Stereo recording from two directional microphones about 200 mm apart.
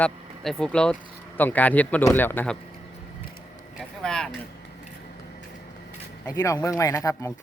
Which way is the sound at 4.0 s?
5° left (ahead or behind).